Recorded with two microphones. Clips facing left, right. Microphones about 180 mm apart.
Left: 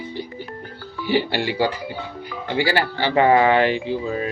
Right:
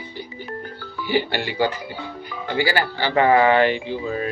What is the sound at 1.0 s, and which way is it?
Speech, 30° left (ahead or behind).